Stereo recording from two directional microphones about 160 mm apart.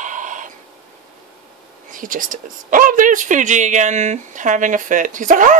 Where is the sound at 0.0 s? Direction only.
50° right (ahead or behind).